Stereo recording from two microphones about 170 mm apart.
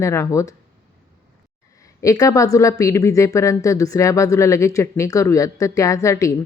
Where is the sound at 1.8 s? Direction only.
20° left (ahead or behind).